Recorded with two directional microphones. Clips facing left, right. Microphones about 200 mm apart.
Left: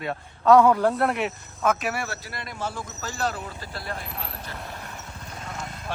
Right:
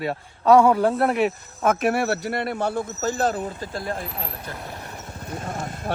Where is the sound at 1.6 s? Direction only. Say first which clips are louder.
Right 5 dB; 55° right (ahead or behind).